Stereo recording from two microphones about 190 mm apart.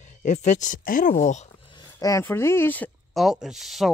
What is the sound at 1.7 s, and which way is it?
Speech, 15° left (ahead or behind).